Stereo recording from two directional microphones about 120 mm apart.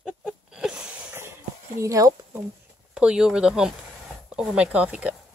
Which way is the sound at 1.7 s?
25° right (ahead or behind).